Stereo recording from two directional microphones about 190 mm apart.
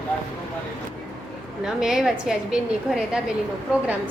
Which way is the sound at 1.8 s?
5° right (ahead or behind).